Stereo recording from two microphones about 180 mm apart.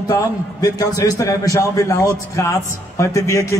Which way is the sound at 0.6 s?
20° left (ahead or behind).